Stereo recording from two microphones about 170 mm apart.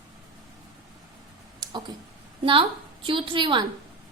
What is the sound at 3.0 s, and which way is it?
Speech, 30° right (ahead or behind).